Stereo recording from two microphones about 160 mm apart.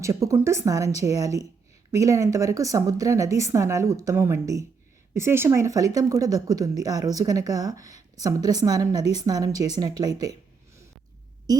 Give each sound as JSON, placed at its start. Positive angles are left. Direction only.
{"t": 0.0, "sound": "speech", "side_deg": -20}
{"t": 11.5, "sound": "speech", "side_deg": -25}